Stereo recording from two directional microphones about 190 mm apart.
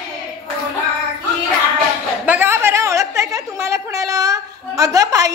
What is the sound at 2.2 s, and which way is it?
A woman's voice, 10° right (ahead or behind).